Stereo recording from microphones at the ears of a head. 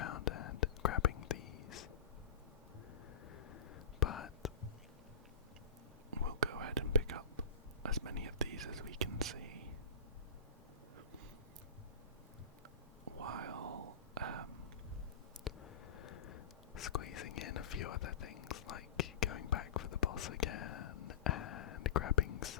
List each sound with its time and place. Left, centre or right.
0.0 s whispering: left
4.0 s whispering: left
6.2 s whispering: right
13.2 s whispering: right
15.4 s whispering: left